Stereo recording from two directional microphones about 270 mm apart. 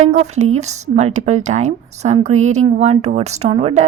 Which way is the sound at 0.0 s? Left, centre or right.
Right.